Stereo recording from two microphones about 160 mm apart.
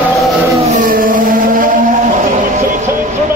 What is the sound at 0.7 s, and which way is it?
Vehicle, 60° right (ahead or behind).